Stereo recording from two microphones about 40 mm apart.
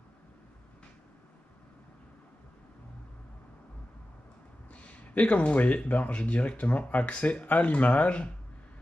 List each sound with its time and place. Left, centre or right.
4.7 s a sound: left
5.9 s speech: left
7.4 s speech: left